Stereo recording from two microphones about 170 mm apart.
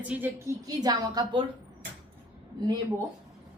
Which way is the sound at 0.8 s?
25° right (ahead or behind).